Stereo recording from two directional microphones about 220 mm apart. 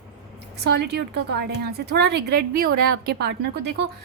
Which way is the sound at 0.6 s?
50° right (ahead or behind).